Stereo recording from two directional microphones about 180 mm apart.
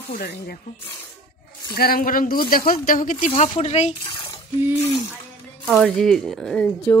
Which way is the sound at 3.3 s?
35° left (ahead or behind).